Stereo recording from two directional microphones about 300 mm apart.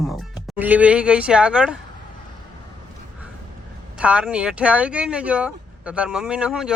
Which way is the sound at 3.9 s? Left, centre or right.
Centre.